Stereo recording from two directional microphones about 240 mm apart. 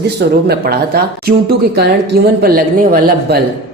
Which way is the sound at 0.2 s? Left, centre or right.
Right.